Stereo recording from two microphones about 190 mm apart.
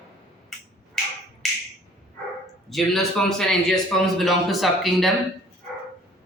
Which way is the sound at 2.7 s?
Centre (ahead or behind).